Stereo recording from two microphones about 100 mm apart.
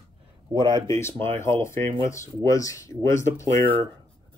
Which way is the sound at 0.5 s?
40° right (ahead or behind).